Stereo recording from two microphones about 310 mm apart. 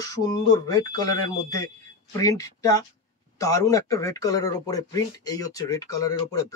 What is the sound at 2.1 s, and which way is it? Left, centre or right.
Speech, centre.